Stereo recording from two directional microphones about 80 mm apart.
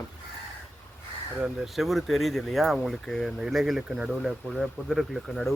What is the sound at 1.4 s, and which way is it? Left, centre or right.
Speech, centre.